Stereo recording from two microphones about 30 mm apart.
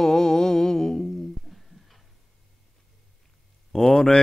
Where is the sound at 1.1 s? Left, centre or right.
Centre.